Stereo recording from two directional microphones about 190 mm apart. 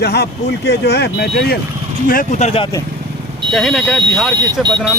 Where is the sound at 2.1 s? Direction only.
45° left (ahead or behind).